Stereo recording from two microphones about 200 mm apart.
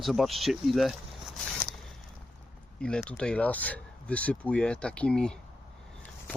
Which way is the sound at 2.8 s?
5° left (ahead or behind).